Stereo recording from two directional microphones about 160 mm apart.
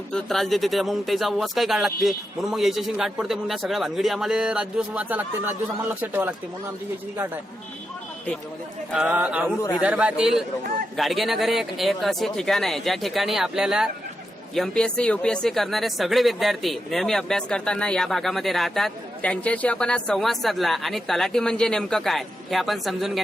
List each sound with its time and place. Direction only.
0.1 s speech: 5° left (ahead or behind)
8.9 s a man's voice: 5° right (ahead or behind)
9.6 s a man's voice: 20° left (ahead or behind)
9.8 s a man's voice: 5° right (ahead or behind)